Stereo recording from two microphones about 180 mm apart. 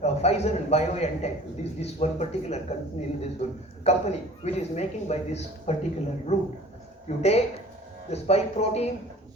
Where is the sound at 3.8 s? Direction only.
35° left (ahead or behind).